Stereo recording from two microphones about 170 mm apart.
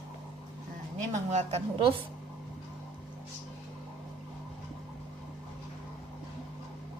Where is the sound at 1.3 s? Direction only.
35° right (ahead or behind).